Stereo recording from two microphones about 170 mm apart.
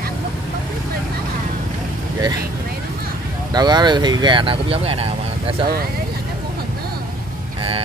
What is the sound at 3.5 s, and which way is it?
Speech, 25° right (ahead or behind).